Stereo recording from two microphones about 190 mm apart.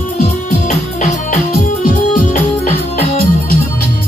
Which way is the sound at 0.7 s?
40° left (ahead or behind).